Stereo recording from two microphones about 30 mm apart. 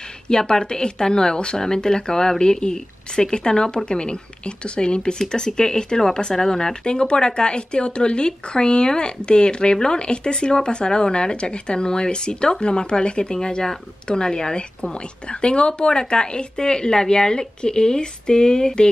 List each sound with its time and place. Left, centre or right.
0.3 s speech: left